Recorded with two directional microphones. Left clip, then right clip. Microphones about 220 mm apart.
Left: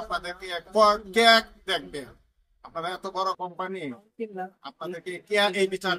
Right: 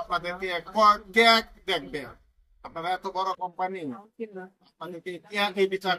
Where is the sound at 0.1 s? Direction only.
20° left (ahead or behind).